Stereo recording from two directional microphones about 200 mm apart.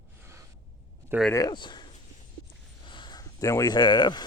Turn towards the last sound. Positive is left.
turn(degrees=20)  # may be behind; listen again after turning